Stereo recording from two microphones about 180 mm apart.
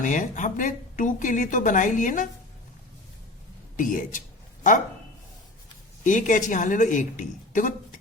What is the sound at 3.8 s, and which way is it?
Speech, 45° left (ahead or behind).